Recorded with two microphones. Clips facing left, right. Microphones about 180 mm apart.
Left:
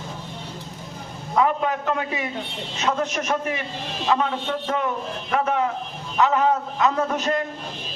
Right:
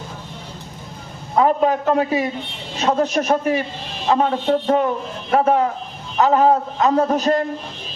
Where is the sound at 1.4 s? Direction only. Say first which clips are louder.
Right 5 dB; 35° right (ahead or behind).